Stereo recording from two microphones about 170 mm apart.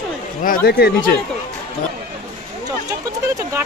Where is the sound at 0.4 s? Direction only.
65° left (ahead or behind).